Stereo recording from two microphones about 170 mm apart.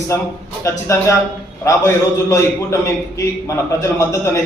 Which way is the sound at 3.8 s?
20° left (ahead or behind).